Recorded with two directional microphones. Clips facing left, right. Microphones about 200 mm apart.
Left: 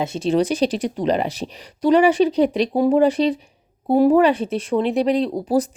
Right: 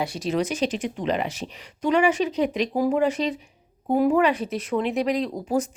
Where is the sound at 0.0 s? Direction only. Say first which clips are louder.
Left 6 dB; 25° left (ahead or behind).